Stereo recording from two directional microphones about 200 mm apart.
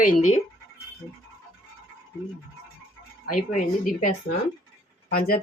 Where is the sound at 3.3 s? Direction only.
40° left (ahead or behind).